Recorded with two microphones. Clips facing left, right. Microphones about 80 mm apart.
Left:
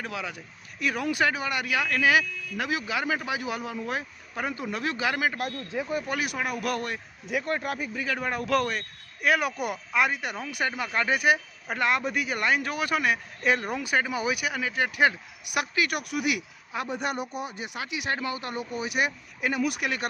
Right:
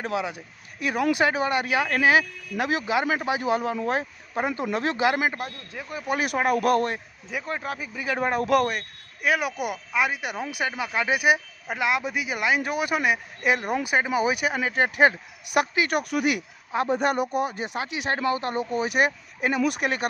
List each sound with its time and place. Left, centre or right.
0.0 s speech: right
5.7 s speech: centre
6.1 s speech: right
7.3 s speech: centre
8.0 s speech: right
9.2 s speech: centre; by 16.0 s right
16.0 s speech: right
17.6 s speech: right